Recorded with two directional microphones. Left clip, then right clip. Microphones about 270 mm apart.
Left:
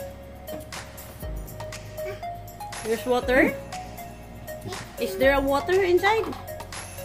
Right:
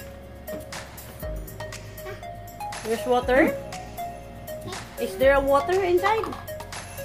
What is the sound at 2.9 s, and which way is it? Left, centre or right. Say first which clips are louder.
Speech: right 1 dB; centre.